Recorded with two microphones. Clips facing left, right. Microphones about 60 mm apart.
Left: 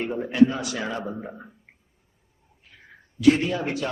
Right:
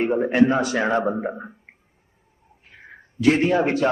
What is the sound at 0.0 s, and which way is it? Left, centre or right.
A man's voice, right.